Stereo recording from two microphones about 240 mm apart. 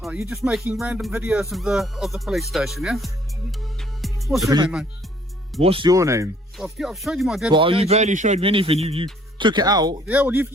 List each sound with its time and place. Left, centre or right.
0.0 s speech: centre
3.8 s music: centre
4.4 s speech: centre
6.6 s speech: centre
7.5 s a man's voice: right